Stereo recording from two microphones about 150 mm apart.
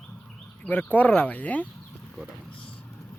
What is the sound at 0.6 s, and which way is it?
Speech, 10° left (ahead or behind).